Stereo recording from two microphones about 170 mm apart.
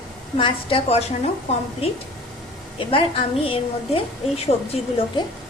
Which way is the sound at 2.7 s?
35° left (ahead or behind).